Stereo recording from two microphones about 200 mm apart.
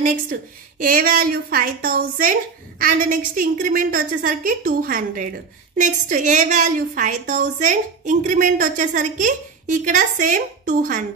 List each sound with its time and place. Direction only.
0.0 s a woman's voice: 45° right (ahead or behind)